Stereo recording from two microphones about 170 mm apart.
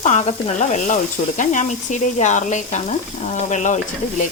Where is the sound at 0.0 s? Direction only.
45° left (ahead or behind).